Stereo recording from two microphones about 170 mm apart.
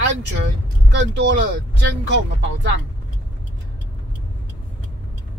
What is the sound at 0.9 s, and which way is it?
Speech, 90° right.